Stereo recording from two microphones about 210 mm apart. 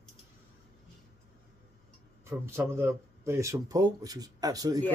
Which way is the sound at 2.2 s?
10° right (ahead or behind).